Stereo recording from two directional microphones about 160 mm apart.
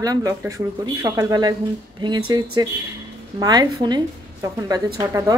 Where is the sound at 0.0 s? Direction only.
20° right (ahead or behind).